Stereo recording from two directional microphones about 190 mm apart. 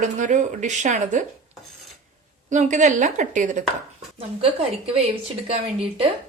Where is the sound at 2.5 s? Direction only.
40° right (ahead or behind).